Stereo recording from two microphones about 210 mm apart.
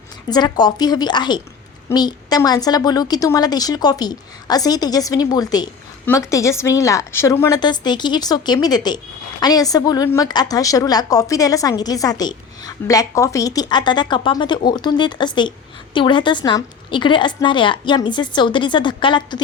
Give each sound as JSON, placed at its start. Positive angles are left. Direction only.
{"t": 0.3, "sound": "a woman's voice", "side_deg": 20}